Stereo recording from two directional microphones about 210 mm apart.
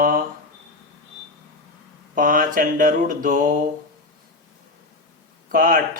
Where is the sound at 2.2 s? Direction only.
40° right (ahead or behind).